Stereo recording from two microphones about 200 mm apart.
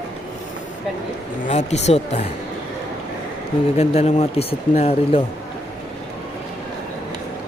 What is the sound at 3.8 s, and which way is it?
Speech, 30° left (ahead or behind).